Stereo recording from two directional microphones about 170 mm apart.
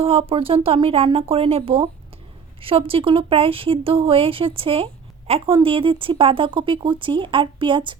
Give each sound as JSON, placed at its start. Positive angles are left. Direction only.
{"t": 0.0, "sound": "speech", "side_deg": -35}